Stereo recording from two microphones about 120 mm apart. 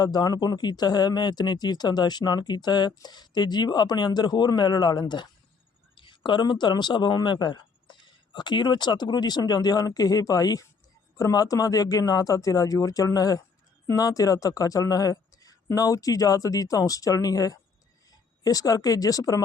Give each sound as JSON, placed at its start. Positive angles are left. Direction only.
{"t": 0.0, "sound": "speech", "side_deg": 35}